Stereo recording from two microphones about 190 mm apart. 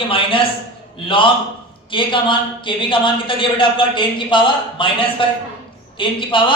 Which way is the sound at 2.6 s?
25° left (ahead or behind).